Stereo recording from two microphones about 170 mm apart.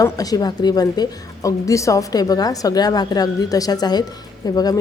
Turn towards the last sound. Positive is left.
turn(degrees=20)  # may be behind; listen again after turning